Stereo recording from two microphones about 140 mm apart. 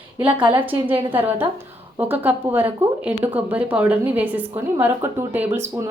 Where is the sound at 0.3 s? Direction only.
35° right (ahead or behind).